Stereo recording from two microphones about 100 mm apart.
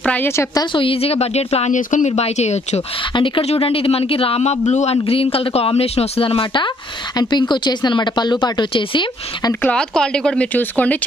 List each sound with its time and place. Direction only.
0.0 s a woman's voice: 15° left (ahead or behind)
0.7 s speech: 70° left (ahead or behind); by 2.8 s 90° left
3.2 s speech: 65° left (ahead or behind); by 4.9 s 90° left
5.0 s speech: 70° left (ahead or behind); by 9.0 s 55° left (ahead or behind)
9.5 s speech: 15° left (ahead or behind)